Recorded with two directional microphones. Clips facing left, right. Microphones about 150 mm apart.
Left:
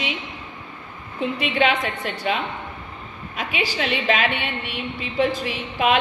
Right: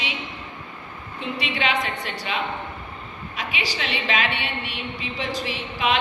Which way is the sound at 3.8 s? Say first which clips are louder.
Left 4 dB; 45° left (ahead or behind).